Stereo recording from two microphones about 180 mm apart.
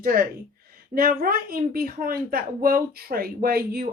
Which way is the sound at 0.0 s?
55° right (ahead or behind).